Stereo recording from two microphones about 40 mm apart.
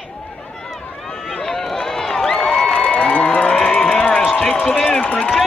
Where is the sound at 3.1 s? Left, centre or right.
Left.